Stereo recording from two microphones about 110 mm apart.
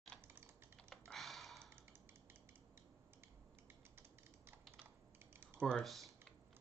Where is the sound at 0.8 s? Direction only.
Centre (ahead or behind).